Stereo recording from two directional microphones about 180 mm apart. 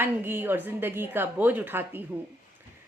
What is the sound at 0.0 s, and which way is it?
A woman's voice, 10° right (ahead or behind).